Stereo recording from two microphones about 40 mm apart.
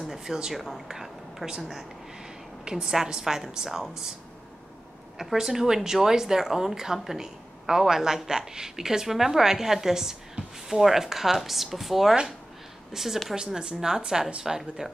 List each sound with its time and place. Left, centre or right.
0.1 s speech: centre
0.6 s speech: centre
0.8 s speech: centre
5.2 s speech: centre